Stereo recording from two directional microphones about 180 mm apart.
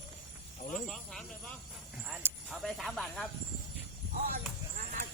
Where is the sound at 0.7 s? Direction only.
Centre (ahead or behind).